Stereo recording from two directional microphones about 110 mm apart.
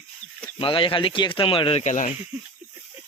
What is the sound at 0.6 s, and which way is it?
Speech, 55° left (ahead or behind).